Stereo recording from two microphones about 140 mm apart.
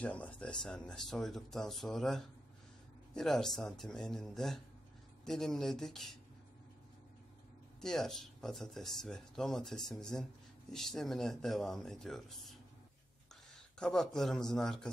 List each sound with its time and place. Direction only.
0.0 s speech: 10° left (ahead or behind)
7.8 s speech: 5° left (ahead or behind)
13.7 s speech: 5° left (ahead or behind)